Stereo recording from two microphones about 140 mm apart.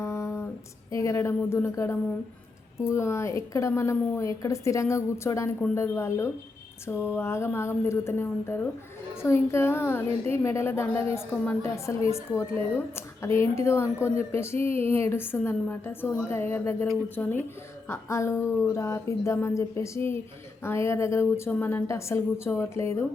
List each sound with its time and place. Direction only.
0.0 s music: 20° left (ahead or behind)
0.9 s a woman's voice: 20° left (ahead or behind)
17.8 s a woman's voice: 20° left (ahead or behind)